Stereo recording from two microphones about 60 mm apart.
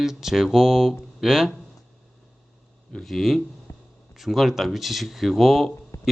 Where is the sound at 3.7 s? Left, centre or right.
Left.